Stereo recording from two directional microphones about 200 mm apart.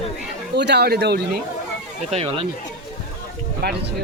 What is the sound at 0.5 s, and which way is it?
Speech, 55° right (ahead or behind).